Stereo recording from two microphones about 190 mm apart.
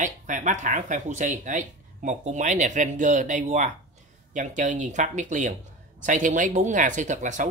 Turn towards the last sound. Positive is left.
turn(degrees=-40)  # may be behind; listen again after turning